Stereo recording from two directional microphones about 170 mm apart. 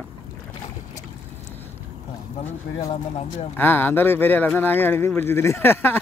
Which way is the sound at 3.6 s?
10° left (ahead or behind).